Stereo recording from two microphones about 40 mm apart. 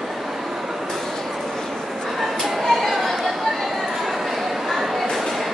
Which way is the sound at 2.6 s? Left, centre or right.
Centre.